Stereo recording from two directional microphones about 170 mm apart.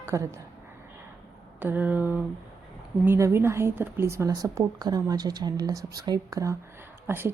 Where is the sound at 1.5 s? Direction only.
10° right (ahead or behind).